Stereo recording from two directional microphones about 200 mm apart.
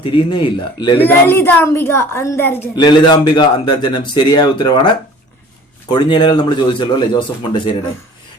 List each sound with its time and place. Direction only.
0.0 s a man's voice: 25° left (ahead or behind)
0.9 s a woman's voice: 10° left (ahead or behind)
2.7 s a man's voice: 20° left (ahead or behind)
5.9 s a man's voice: 25° left (ahead or behind)